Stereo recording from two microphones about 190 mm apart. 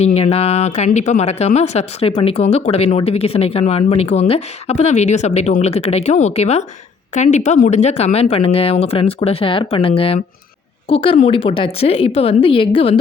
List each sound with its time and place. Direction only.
0.0 s a woman's voice: 35° left (ahead or behind)